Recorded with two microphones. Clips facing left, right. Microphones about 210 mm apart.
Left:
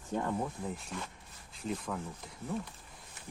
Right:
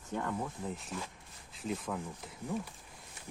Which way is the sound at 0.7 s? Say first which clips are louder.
Even; centre (ahead or behind).